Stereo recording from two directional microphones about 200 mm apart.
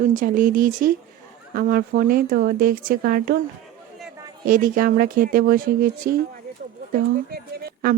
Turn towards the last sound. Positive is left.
turn(degrees=-45)  # may be behind; listen again after turning